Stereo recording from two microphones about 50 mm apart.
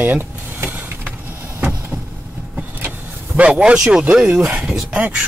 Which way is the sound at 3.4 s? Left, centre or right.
Right.